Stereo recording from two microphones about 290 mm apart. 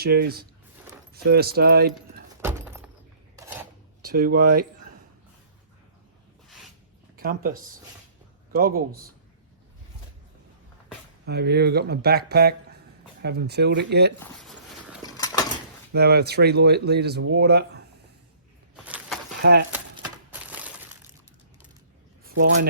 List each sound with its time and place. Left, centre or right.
0.0 s speech: right
2.4 s a sound: centre
4.0 s speech: right
7.2 s speech: right
11.3 s speech: right
14.2 s a sound: centre
15.0 s a sound: centre
15.9 s speech: right
18.9 s a sound: centre
19.4 s speech: right
20.3 s glass: centre
22.4 s speech: right